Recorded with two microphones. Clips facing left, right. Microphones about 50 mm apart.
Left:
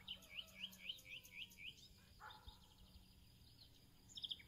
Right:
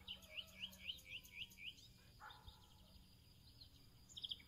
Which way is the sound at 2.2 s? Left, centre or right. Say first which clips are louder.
Even; centre.